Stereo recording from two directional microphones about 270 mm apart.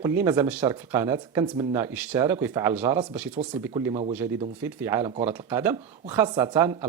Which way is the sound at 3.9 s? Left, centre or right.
Right.